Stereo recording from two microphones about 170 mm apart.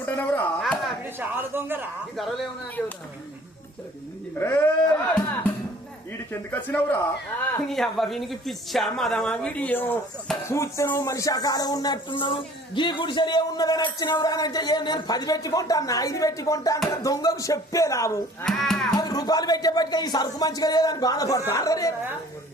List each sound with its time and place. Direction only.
0.0 s chop: 10° left (ahead or behind)
1.0 s a man's voice: 10° right (ahead or behind)
2.1 s speech: centre (ahead or behind)
4.4 s speech: 10° left (ahead or behind)
6.3 s speech: 10° left (ahead or behind)
18.4 s speech: centre (ahead or behind)
18.9 s speech: 20° left (ahead or behind)